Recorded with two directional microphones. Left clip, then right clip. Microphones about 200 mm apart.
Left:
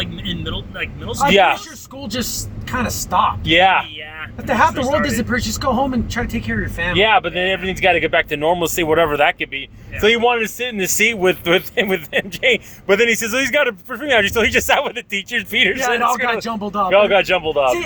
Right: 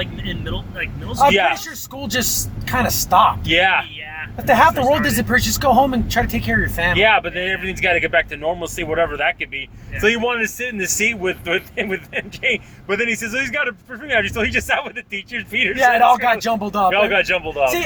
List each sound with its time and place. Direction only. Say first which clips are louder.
1.1 s speech: left 1 dB; 40° left (ahead or behind)
2.6 s speech: right 4 dB; 10° right (ahead or behind)
3.4 s speech: left 3 dB; 35° left (ahead or behind)
4.4 s speech: right 3 dB; 15° right (ahead or behind)
6.9 s speech: left 2 dB; 30° left (ahead or behind)
16.0 s speech: right 4 dB; 10° right (ahead or behind)
16.9 s speech: left 7 dB; 35° left (ahead or behind)